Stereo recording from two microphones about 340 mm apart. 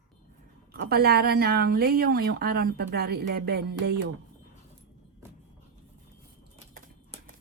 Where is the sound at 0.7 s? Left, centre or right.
Right.